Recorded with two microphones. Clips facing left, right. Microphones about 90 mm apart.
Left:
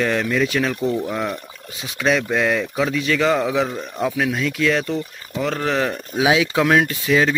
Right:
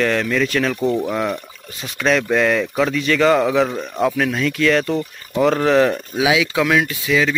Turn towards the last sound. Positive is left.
turn(degrees=35)  # may be behind; listen again after turning